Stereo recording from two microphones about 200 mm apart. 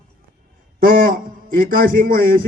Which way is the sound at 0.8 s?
45° right (ahead or behind).